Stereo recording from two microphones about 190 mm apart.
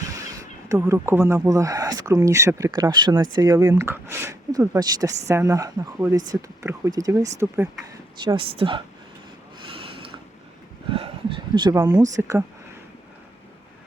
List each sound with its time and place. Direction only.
0.7 s speech: 15° right (ahead or behind)
8.2 s speech: 25° right (ahead or behind)
9.7 s a sound: 30° right (ahead or behind)
11.5 s speech: 20° right (ahead or behind)